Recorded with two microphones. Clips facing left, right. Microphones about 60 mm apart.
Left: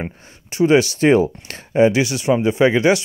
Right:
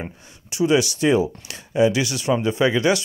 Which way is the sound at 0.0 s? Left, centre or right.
Left.